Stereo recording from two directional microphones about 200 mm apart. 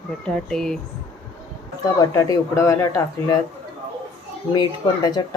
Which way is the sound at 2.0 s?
20° left (ahead or behind).